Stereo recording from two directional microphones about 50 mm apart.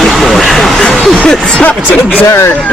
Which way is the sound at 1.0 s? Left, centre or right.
Centre.